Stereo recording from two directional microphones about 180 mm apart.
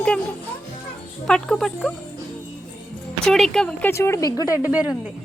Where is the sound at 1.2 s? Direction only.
Centre (ahead or behind).